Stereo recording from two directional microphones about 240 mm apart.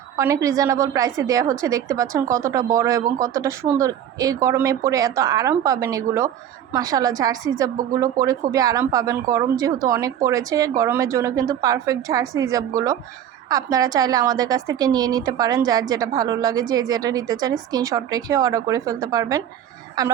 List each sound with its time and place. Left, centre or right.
0.2 s a woman's voice: centre